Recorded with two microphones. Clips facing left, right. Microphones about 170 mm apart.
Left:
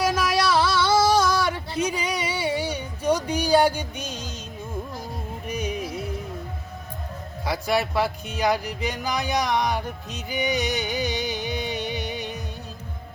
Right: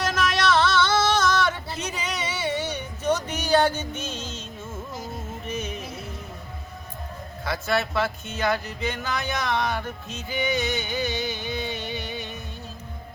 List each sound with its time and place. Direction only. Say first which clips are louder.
0.0 s singing: left 2 dB; 10° left (ahead or behind)
5.5 s music: left 4 dB; 15° left (ahead or behind)
7.4 s speech: left 2 dB; 15° left (ahead or behind)